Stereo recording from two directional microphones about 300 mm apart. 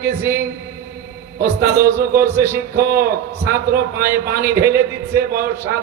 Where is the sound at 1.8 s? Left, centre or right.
Centre.